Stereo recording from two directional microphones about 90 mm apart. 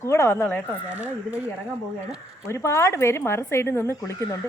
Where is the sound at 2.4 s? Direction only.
30° left (ahead or behind).